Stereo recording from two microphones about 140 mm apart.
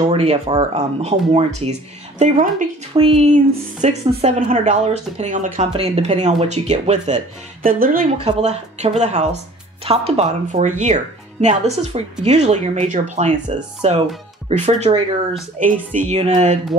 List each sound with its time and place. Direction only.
0.1 s speech: 45° right (ahead or behind)
2.9 s speech: 40° right (ahead or behind)
3.3 s speech: 60° right (ahead or behind)
5.7 s speech: 45° right (ahead or behind)
7.6 s speech: 90° right
8.2 s speech: 50° right (ahead or behind)
15.6 s speech: 65° right (ahead or behind)
16.1 s speech: 55° right (ahead or behind)